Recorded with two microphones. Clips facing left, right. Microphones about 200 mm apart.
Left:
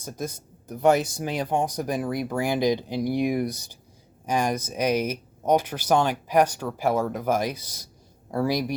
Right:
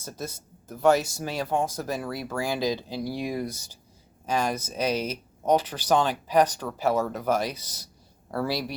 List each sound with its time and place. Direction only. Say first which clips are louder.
0.7 s speech: left 1 dB; 20° left (ahead or behind)